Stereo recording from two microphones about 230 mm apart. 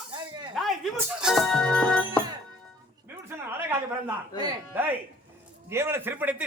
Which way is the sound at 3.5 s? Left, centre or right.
Centre.